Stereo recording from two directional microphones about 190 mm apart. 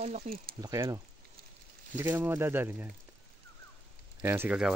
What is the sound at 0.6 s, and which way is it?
Speech, 20° right (ahead or behind).